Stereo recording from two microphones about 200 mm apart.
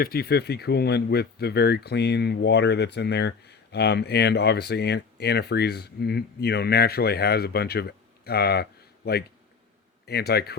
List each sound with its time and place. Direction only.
0.0 s speech: 50° left (ahead or behind)